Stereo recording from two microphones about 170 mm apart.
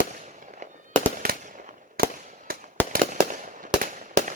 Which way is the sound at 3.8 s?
50° right (ahead or behind).